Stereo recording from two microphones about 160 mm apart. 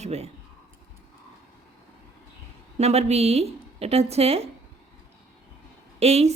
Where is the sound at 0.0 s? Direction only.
45° right (ahead or behind).